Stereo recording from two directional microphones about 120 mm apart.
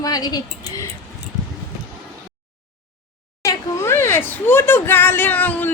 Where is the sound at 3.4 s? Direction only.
25° left (ahead or behind).